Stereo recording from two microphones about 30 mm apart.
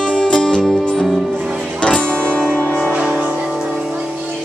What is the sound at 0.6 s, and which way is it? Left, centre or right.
Music, centre.